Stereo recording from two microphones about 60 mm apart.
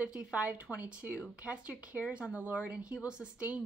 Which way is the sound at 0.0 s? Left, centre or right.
Centre.